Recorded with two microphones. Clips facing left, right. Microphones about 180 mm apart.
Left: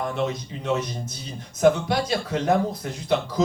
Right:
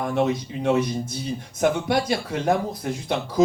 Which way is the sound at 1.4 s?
55° right (ahead or behind).